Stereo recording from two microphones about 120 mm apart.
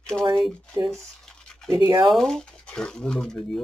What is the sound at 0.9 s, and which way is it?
Scratch, 5° left (ahead or behind).